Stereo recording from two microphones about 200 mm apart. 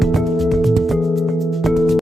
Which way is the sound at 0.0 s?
Centre (ahead or behind).